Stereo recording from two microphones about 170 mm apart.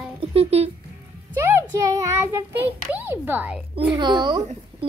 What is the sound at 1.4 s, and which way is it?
A child's voice, 15° right (ahead or behind).